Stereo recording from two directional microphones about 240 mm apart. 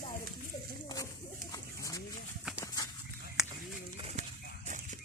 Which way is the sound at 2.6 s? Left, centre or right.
Centre.